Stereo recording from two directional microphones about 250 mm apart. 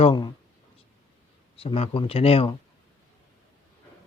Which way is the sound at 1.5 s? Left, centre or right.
Left.